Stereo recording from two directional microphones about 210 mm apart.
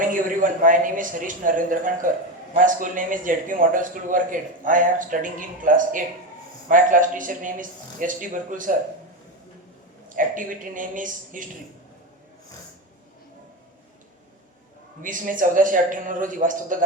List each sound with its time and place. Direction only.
0.0 s a man's voice: 40° right (ahead or behind)
10.2 s a man's voice: 40° right (ahead or behind)
15.0 s a man's voice: 40° right (ahead or behind)